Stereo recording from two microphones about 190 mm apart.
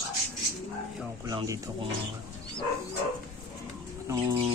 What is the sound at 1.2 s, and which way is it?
Speech, 20° right (ahead or behind).